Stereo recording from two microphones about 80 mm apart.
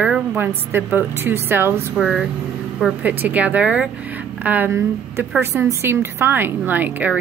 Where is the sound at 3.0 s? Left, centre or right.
Right.